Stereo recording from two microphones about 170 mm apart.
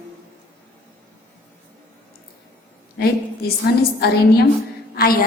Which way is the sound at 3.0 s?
65° left (ahead or behind).